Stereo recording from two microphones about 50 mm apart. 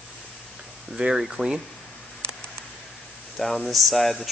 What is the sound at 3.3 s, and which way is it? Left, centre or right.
Speech, centre.